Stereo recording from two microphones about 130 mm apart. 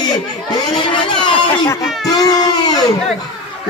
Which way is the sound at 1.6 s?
25° left (ahead or behind).